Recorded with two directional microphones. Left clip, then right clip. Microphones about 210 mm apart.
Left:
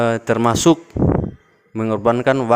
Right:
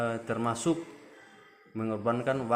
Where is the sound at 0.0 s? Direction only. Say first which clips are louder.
Left 14 dB; 50° left (ahead or behind).